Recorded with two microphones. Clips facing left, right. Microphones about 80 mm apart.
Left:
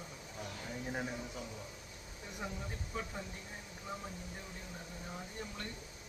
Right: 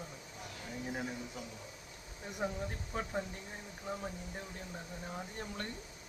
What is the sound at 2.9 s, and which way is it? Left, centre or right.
Speech, right.